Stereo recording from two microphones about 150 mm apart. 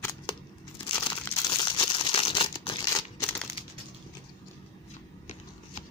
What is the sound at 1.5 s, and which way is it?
Crumpling, 30° left (ahead or behind).